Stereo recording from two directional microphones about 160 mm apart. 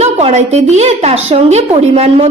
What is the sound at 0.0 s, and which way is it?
A woman's voice, 45° right (ahead or behind).